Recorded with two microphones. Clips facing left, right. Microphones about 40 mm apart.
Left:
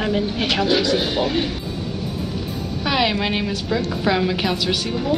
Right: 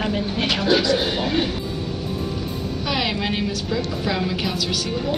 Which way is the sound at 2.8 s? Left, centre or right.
Centre.